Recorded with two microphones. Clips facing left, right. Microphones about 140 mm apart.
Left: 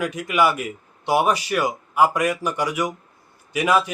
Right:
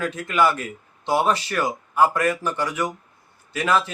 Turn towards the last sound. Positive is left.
turn(degrees=10)  # may be behind; listen again after turning